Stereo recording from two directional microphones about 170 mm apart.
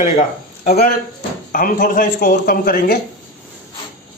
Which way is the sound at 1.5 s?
55° left (ahead or behind).